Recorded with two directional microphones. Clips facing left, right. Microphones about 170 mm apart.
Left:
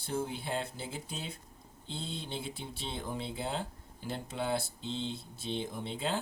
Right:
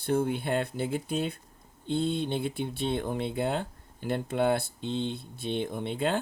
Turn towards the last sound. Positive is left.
turn(degrees=-60)  # may be behind; listen again after turning